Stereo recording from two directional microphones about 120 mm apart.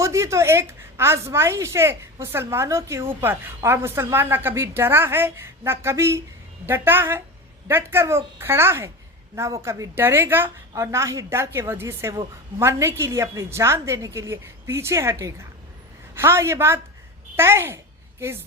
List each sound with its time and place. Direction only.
0.0 s a woman's voice: 25° right (ahead or behind)